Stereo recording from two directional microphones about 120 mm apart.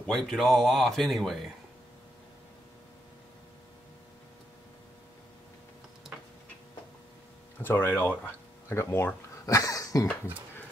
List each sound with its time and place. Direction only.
0.0 s speech: 5° left (ahead or behind)
7.6 s speech: 20° left (ahead or behind)
10.3 s speech: 15° right (ahead or behind)